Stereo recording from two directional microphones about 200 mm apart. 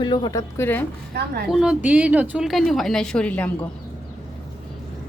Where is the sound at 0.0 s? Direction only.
20° left (ahead or behind).